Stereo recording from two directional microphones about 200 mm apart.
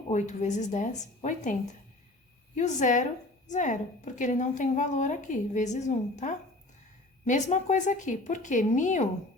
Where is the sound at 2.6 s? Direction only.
40° left (ahead or behind).